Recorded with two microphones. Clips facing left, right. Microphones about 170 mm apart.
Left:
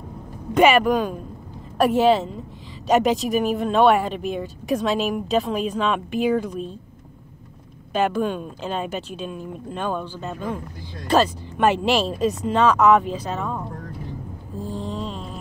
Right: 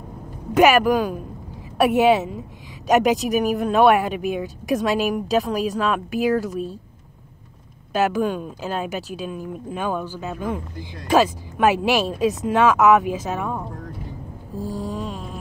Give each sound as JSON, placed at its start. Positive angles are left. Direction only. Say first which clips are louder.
{"t": 0.5, "sound": "speech", "louder": "right 1 dB", "side_deg": -5}
{"t": 7.9, "sound": "speech", "louder": "right 1 dB", "side_deg": -5}
{"t": 14.6, "sound": "mantra", "louder": "right 2 dB", "side_deg": -40}
{"t": 15.0, "sound": "mantra", "louder": "right 1 dB", "side_deg": -5}